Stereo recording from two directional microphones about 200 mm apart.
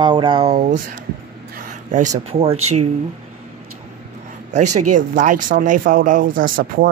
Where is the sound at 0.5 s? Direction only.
40° right (ahead or behind).